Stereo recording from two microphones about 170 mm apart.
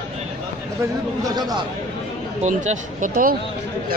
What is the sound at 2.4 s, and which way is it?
Speech, 45° right (ahead or behind).